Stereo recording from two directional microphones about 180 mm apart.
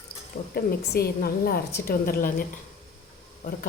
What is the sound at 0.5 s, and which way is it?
A woman's voice, 60° left (ahead or behind).